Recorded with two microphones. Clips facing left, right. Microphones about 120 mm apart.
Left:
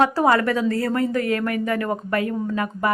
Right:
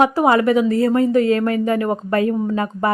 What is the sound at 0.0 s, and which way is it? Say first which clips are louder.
Speech: right 3 dB; 15° right (ahead or behind).